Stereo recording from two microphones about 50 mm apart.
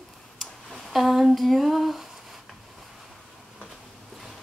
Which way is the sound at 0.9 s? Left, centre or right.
Centre.